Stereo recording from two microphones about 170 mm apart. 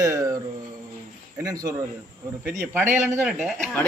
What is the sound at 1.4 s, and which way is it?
Speech, 20° right (ahead or behind).